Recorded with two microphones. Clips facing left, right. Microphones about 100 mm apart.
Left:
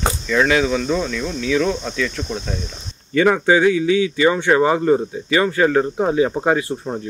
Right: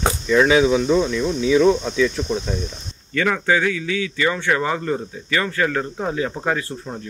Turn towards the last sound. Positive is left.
turn(degrees=15)  # may be behind; listen again after turning